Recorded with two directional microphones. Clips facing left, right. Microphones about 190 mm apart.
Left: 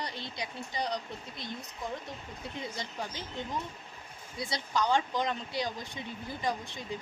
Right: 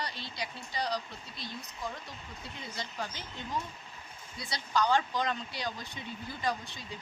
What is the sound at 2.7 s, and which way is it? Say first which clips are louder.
Speech: left 1 dB; 20° left (ahead or behind).